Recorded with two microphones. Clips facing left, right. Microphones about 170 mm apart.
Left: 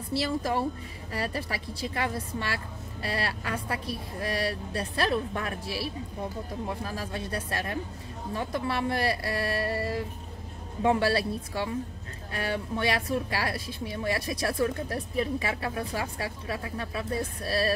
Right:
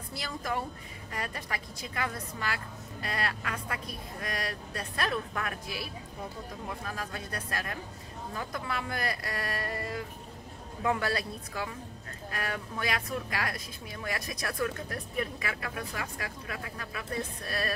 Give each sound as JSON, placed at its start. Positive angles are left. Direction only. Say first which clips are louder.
{"t": 0.1, "sound": "a woman's voice", "louder": "left 7 dB", "side_deg": 30}